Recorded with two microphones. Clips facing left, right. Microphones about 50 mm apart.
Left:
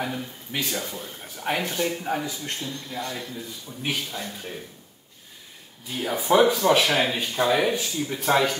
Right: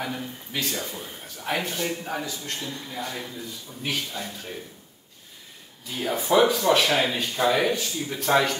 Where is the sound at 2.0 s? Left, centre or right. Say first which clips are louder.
Left 3 dB; centre.